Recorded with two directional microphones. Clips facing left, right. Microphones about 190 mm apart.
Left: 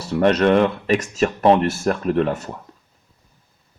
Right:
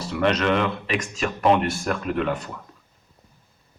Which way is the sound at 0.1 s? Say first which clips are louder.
Left 6 dB; 45° left (ahead or behind).